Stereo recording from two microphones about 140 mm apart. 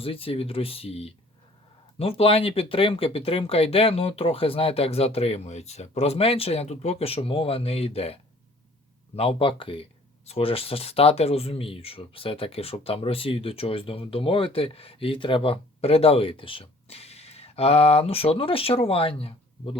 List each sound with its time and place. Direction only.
0.0 s speech: 40° left (ahead or behind)